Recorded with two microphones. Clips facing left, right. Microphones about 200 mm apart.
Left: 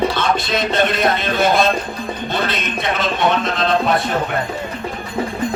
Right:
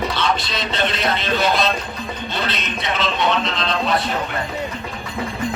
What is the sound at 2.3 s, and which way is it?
A man's voice, 50° left (ahead or behind).